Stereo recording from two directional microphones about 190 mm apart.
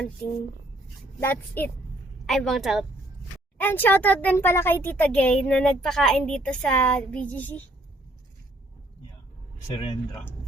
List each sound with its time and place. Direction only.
1.2 s a child's voice: 10° left (ahead or behind)
3.6 s a child's voice: 10° left (ahead or behind)
9.7 s speech: 25° left (ahead or behind)